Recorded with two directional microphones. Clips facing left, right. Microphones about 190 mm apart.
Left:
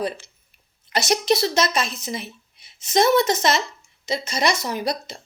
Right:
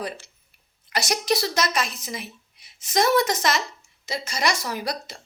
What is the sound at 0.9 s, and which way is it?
A woman's voice, 25° left (ahead or behind).